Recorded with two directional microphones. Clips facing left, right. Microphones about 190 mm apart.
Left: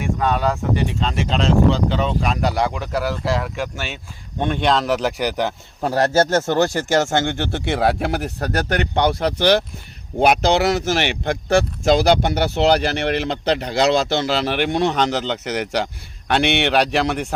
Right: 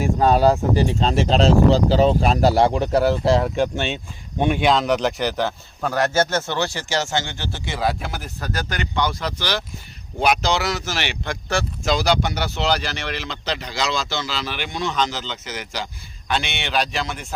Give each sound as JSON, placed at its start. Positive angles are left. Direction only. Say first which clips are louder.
{"t": 0.0, "sound": "speech", "louder": "right 4 dB", "side_deg": -35}
{"t": 4.4, "sound": "speech", "louder": "right 1 dB", "side_deg": -10}
{"t": 5.8, "sound": "speech", "louder": "left 3 dB", "side_deg": 30}